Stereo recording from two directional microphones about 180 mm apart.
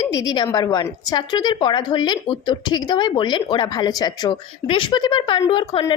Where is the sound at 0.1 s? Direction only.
20° left (ahead or behind).